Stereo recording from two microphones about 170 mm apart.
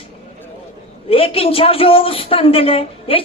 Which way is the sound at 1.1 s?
35° left (ahead or behind).